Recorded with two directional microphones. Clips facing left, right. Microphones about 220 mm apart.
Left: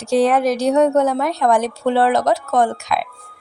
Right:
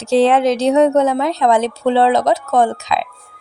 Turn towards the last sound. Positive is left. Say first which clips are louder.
# right 2 dB
turn(degrees=-20)  # may be behind; listen again after turning